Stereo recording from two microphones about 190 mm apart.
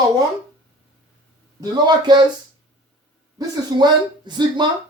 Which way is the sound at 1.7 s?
20° right (ahead or behind).